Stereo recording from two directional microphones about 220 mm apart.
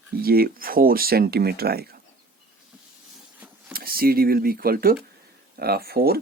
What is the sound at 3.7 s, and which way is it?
Speech, 45° right (ahead or behind).